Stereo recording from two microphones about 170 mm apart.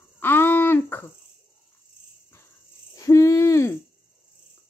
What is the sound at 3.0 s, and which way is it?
Hoot, 20° left (ahead or behind).